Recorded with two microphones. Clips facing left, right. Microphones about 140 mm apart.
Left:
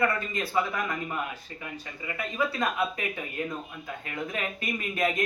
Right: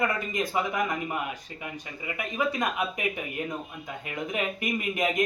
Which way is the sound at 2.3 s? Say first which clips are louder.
Right 1 dB; 15° right (ahead or behind).